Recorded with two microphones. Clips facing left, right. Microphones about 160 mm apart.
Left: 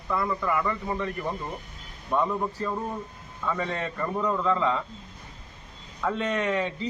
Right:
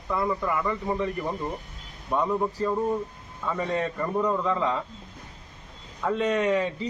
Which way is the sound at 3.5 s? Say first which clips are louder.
Right 2 dB; centre (ahead or behind).